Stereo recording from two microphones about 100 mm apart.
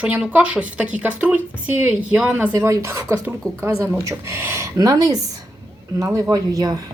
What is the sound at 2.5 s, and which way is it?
A woman's voice, 30° right (ahead or behind).